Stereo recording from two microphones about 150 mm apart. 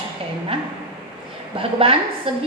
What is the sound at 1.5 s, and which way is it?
Speech, 40° right (ahead or behind).